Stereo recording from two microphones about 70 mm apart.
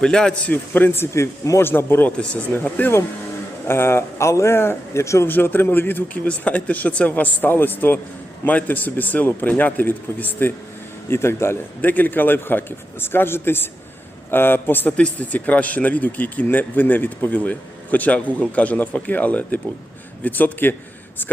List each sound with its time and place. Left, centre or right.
0.0 s a man's voice: centre
0.5 s speech: left
2.0 s speech: centre
3.7 s speech: left
5.3 s speech: left
11.1 s speech: left
11.8 s speech: left